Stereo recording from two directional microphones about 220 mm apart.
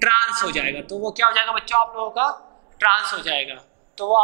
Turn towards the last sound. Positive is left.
turn(degrees=-15)  # may be behind; listen again after turning